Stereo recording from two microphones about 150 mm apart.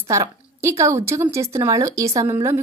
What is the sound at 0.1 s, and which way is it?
A woman's voice, 20° right (ahead or behind).